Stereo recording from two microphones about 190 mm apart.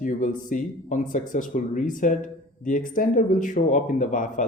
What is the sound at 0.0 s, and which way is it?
Speech, 45° left (ahead or behind).